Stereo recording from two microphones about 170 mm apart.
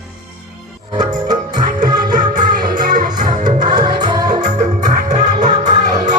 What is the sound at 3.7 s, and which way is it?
Music, 25° right (ahead or behind).